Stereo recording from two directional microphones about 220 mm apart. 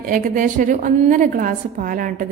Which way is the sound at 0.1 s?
35° right (ahead or behind).